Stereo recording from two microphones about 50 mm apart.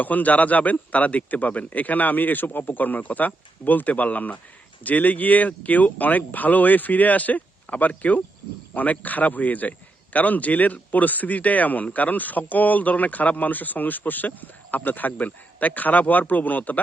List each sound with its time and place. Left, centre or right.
0.0 s a man's voice: left